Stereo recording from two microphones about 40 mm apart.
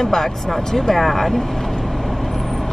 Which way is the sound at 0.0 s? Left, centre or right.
Centre.